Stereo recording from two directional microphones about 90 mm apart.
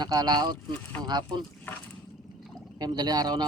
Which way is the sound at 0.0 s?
50° right (ahead or behind).